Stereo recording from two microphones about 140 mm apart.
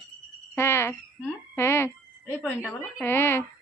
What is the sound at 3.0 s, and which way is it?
Speech, 15° left (ahead or behind).